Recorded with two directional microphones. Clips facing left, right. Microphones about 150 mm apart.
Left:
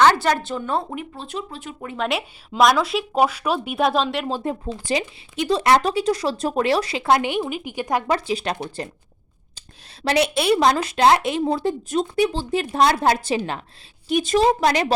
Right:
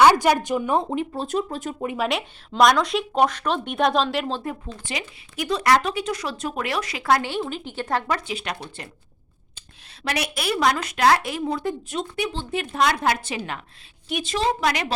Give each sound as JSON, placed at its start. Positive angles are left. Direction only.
{"t": 0.0, "sound": "speech", "side_deg": -10}
{"t": 1.1, "sound": "speech", "side_deg": -40}
{"t": 2.0, "sound": "speech", "side_deg": 0}
{"t": 4.6, "sound": "speech", "side_deg": 40}
{"t": 5.4, "sound": "speech", "side_deg": 25}
{"t": 8.0, "sound": "speech", "side_deg": 30}
{"t": 9.6, "sound": "speech", "side_deg": 30}